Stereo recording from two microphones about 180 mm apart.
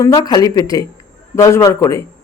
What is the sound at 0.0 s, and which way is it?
A woman's voice, 15° left (ahead or behind).